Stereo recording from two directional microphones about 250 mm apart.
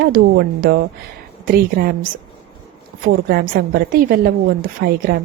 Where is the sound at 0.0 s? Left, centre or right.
Right.